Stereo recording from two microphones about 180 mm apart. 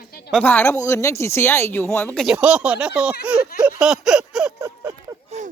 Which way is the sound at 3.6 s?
5° right (ahead or behind).